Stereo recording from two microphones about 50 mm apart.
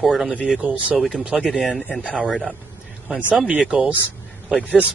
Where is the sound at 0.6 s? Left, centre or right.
Right.